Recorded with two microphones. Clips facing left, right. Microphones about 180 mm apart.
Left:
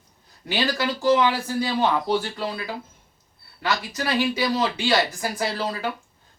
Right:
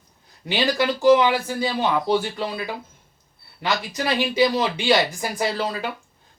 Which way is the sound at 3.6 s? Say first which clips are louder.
Right 1 dB; 20° right (ahead or behind).